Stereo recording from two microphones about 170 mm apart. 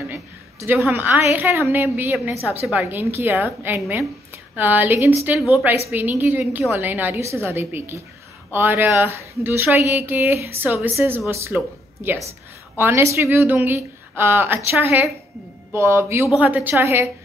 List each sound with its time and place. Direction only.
0.1 s a sound: 10° right (ahead or behind)
0.9 s a woman's voice: 10° right (ahead or behind)
5.9 s speech: 10° right (ahead or behind)